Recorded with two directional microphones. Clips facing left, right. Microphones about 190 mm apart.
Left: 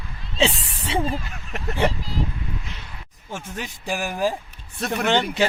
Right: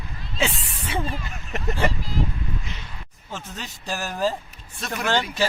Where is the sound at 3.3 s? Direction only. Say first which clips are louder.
Left 3 dB; 10° left (ahead or behind).